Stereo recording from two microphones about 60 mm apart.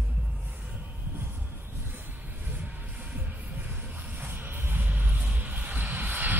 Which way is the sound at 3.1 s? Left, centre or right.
Right.